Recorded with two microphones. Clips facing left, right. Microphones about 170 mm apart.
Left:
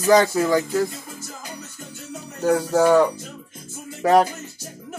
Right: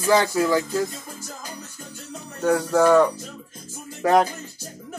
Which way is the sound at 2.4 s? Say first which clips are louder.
Left 1 dB; 30° left (ahead or behind).